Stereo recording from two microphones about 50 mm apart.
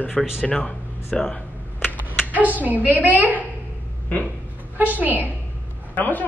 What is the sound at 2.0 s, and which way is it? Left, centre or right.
Speech, right.